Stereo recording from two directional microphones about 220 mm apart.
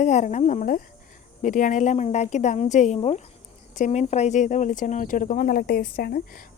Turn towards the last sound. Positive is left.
turn(degrees=40)  # may be behind; listen again after turning